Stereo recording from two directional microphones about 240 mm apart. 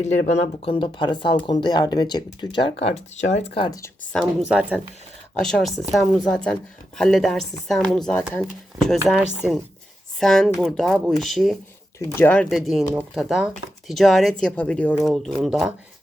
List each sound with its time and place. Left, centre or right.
0.3 s speech: left
4.2 s speech: centre